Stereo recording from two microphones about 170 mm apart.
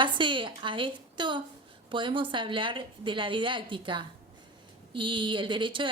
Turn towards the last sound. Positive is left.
turn(degrees=-30)  # may be behind; listen again after turning